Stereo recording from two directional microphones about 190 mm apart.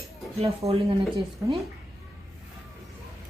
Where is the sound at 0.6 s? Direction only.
15° right (ahead or behind).